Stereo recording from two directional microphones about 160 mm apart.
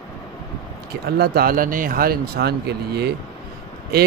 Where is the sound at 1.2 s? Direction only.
75° right (ahead or behind).